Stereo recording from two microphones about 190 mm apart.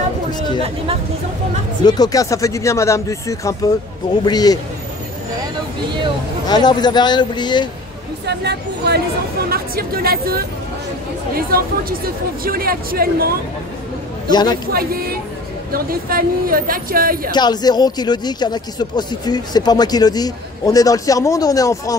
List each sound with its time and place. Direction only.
0.3 s speech: 20° left (ahead or behind)
1.9 s speech: 20° left (ahead or behind)
6.4 s speech: 20° left (ahead or behind)
8.3 s speech: 60° right (ahead or behind)
14.3 s speech: 20° left (ahead or behind)
14.7 s speech: 50° right (ahead or behind)
17.3 s speech: 20° left (ahead or behind)